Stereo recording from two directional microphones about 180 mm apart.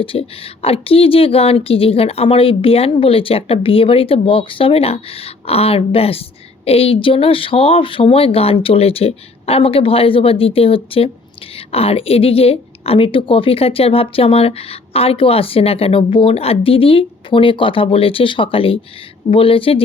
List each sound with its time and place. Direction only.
0.0 s a woman's voice: 30° left (ahead or behind)